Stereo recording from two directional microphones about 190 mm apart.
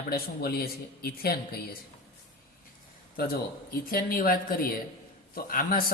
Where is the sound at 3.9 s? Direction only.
50° left (ahead or behind).